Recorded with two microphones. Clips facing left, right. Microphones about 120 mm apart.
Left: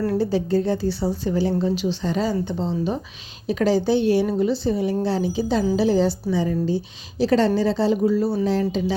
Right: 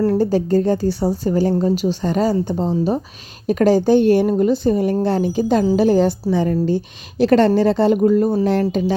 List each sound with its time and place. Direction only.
0.0 s a woman's voice: 40° right (ahead or behind); by 9.0 s 60° right (ahead or behind)